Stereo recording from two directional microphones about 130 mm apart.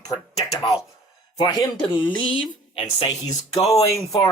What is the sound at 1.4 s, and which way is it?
Speech, 30° left (ahead or behind).